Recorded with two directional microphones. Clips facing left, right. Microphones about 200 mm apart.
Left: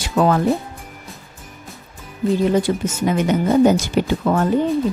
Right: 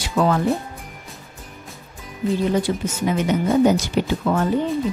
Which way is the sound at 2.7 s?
45° left (ahead or behind).